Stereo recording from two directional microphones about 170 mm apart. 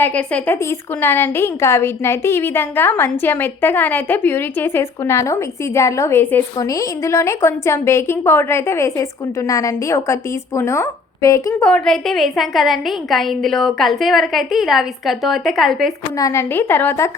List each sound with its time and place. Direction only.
0.0 s a woman's voice: 10° left (ahead or behind)
11.6 s a woman's voice: 5° left (ahead or behind)
16.1 s a woman's voice: 20° left (ahead or behind)